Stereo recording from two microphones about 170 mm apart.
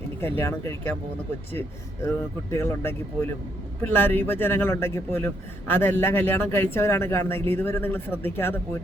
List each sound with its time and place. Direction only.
0.2 s a man's voice: 15° left (ahead or behind)